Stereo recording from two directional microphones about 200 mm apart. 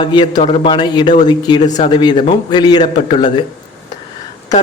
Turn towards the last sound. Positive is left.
turn(degrees=20)  # may be behind; listen again after turning